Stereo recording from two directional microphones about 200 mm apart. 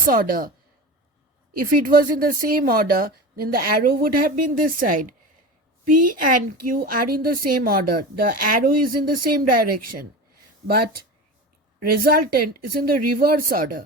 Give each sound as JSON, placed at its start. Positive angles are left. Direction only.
{"t": 0.1, "sound": "a woman's voice", "side_deg": -45}
{"t": 1.8, "sound": "a woman's voice", "side_deg": -45}